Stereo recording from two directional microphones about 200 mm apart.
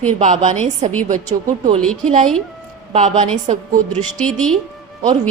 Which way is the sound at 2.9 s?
35° right (ahead or behind).